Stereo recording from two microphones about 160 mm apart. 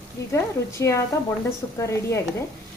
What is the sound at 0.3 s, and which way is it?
A woman's voice, 15° left (ahead or behind).